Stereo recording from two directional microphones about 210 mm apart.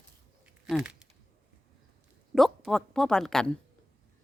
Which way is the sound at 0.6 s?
5° right (ahead or behind).